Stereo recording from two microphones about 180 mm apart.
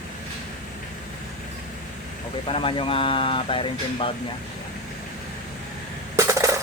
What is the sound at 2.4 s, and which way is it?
Speech, 30° left (ahead or behind).